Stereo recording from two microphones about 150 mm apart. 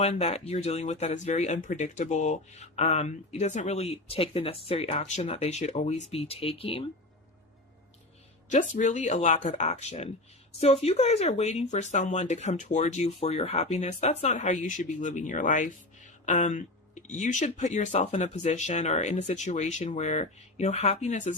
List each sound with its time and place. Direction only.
0.0 s speech: 45° left (ahead or behind)
8.4 s speech: 55° left (ahead or behind)